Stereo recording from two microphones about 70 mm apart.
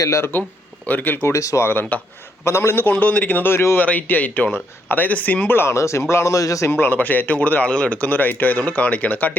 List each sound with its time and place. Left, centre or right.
0.0 s speech: left
0.9 s speech: left
1.3 s speech: left
1.6 s speech: left
2.4 s speech: left
2.7 s speech: left
3.5 s speech: left
3.8 s speech: left
6.7 s speech: left